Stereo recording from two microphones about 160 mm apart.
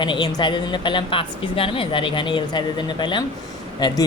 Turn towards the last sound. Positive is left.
turn(degrees=25)  # may be behind; listen again after turning